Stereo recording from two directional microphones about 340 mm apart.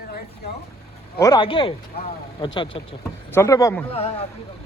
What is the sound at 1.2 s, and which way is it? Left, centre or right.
A man's voice, centre.